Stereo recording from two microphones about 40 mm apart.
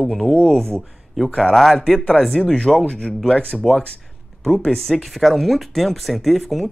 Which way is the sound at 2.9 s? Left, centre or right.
Left.